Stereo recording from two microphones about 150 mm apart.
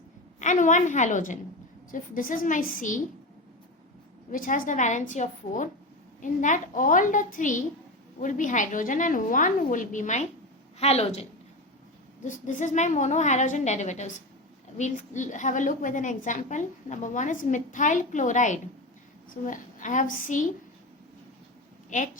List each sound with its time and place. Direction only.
0.3 s a woman's voice: 55° left (ahead or behind)
4.3 s a woman's voice: 65° left (ahead or behind)
10.8 s a woman's voice: 45° left (ahead or behind)
12.2 s a woman's voice: 55° left (ahead or behind)
21.8 s a woman's voice: 60° left (ahead or behind)